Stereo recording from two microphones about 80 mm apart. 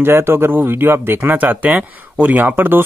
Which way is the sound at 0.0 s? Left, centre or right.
Right.